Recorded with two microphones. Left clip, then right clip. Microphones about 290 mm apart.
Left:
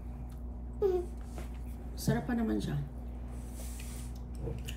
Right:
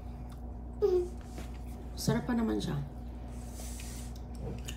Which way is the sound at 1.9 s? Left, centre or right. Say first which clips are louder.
Right 1 dB; centre.